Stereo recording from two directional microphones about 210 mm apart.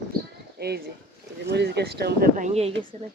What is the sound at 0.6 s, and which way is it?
Speech, 50° right (ahead or behind).